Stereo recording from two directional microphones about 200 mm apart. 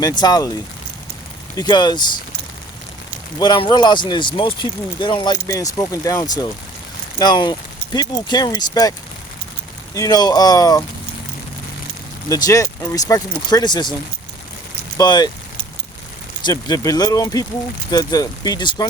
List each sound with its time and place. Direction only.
0.0 s speech: 20° left (ahead or behind)
1.5 s speech: 20° left (ahead or behind)
3.3 s speech: 20° left (ahead or behind)
9.9 s speech: 15° left (ahead or behind)
12.3 s speech: 15° left (ahead or behind)
14.9 s speech: 20° left (ahead or behind)
16.4 s speech: 20° left (ahead or behind)